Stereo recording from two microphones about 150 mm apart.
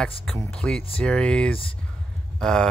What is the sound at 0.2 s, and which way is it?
Speech, 5° left (ahead or behind).